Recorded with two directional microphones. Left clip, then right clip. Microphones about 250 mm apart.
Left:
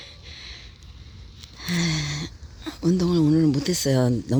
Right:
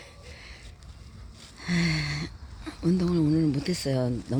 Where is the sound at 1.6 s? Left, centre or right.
Centre.